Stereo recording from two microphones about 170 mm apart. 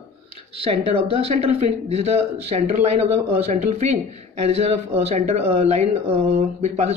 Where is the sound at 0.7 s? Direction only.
35° right (ahead or behind).